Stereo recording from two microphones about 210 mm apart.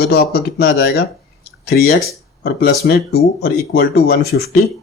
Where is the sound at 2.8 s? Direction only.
50° left (ahead or behind).